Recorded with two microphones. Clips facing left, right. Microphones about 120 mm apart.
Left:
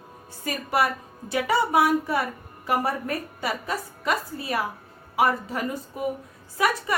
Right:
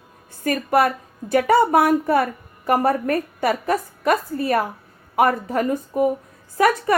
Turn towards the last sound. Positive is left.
turn(degrees=-50)  # may be behind; listen again after turning